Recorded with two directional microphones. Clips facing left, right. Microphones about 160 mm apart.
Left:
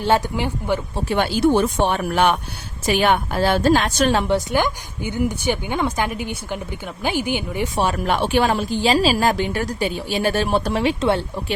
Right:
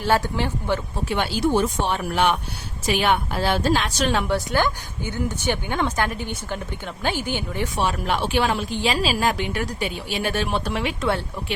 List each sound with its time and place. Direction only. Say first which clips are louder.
0.0 s speech: left 2 dB; 20° left (ahead or behind)
1.0 s a woman's voice: left 5 dB; 45° left (ahead or behind)
4.3 s speech: left 3 dB; 15° left (ahead or behind)
7.8 s a woman's voice: left 4 dB; 50° left (ahead or behind)